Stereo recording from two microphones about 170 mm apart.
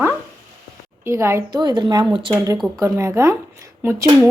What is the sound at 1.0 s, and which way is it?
Speech, 15° right (ahead or behind).